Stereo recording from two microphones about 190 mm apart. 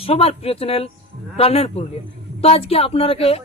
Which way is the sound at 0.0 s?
30° left (ahead or behind).